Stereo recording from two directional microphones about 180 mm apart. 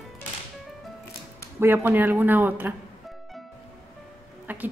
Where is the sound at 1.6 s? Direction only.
10° right (ahead or behind).